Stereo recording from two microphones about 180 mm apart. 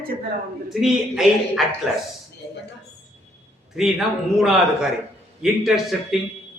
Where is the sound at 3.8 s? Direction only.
5° right (ahead or behind).